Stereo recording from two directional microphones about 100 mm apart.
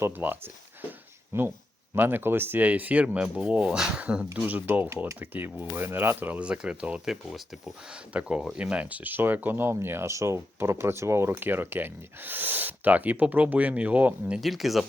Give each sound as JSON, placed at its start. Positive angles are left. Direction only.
{"t": 0.0, "sound": "speech", "side_deg": -20}
{"t": 14.4, "sound": "speech", "side_deg": 0}